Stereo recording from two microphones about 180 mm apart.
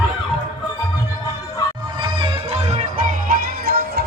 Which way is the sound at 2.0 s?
30° right (ahead or behind).